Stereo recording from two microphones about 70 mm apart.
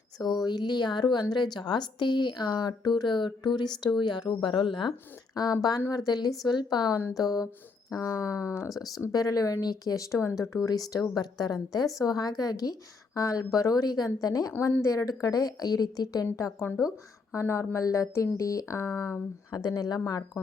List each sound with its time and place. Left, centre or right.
0.3 s a woman's voice: left
6.4 s a woman's voice: left
6.9 s a woman's voice: left
9.1 s speech: left
10.7 s a woman's voice: left
11.1 s a woman's voice: left
14.8 s a woman's voice: left
16.2 s speech: left
19.5 s a woman's voice: left